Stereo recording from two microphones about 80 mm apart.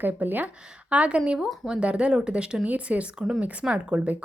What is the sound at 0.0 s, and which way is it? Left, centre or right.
Speech, right.